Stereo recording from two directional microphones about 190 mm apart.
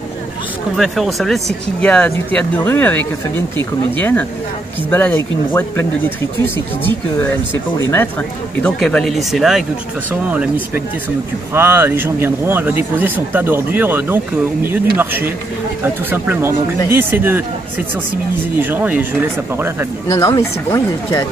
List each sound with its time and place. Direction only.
0.7 s speech: centre (ahead or behind)
8.6 s speech: 5° left (ahead or behind); by 17.4 s 10° right (ahead or behind)
18.6 s speech: 10° right (ahead or behind)
20.1 s speech: 15° left (ahead or behind)